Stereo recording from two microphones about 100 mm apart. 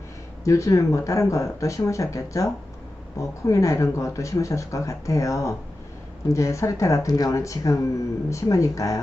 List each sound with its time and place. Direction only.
0.4 s speech: 30° left (ahead or behind)